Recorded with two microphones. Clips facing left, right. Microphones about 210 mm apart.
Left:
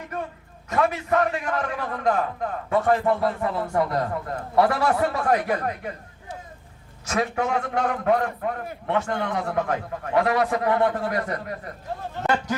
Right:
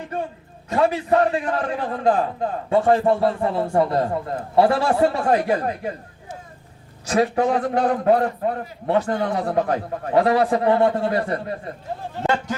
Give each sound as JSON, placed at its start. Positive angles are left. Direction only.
{"t": 0.0, "sound": "a sound", "side_deg": -30}
{"t": 0.7, "sound": "a man's voice", "side_deg": -30}
{"t": 7.0, "sound": "a man's voice", "side_deg": -35}